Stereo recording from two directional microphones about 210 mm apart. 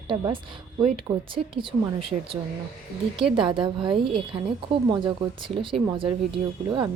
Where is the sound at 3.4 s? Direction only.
25° right (ahead or behind).